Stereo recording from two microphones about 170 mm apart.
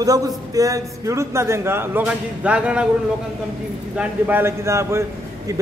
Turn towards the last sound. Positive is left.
turn(degrees=-15)  # may be behind; listen again after turning